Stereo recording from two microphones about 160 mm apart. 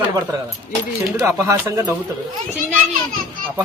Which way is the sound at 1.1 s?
20° right (ahead or behind).